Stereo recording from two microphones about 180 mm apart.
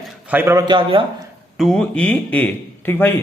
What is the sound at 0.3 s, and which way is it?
Speech, 10° right (ahead or behind).